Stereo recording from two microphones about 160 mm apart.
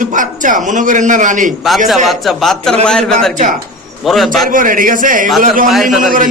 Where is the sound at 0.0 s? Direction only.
55° right (ahead or behind).